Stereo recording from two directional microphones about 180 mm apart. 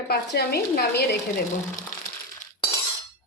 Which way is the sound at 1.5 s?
45° left (ahead or behind).